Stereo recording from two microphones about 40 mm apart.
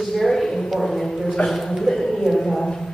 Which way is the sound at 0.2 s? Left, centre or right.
Centre.